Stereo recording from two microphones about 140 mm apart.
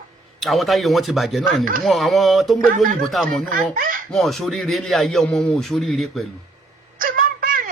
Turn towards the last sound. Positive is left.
turn(degrees=-85)